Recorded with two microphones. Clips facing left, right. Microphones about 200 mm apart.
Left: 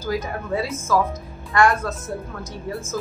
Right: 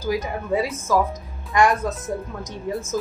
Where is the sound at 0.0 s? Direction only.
15° right (ahead or behind).